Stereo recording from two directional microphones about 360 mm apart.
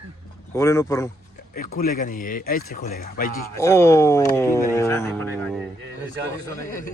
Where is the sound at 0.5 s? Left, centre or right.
Centre.